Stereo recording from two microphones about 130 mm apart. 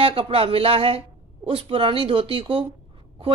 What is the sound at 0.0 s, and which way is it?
A man's voice, 45° right (ahead or behind).